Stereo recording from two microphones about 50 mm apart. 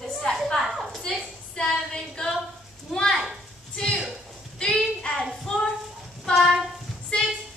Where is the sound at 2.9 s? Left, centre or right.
Centre.